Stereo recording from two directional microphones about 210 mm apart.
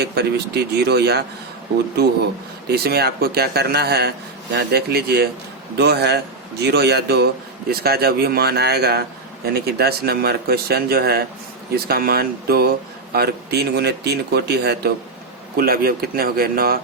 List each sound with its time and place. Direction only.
0.0 s speech: 50° right (ahead or behind)
2.6 s speech: 50° right (ahead or behind)